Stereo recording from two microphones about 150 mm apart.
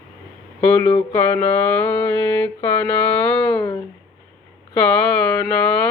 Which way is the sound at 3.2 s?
10° left (ahead or behind).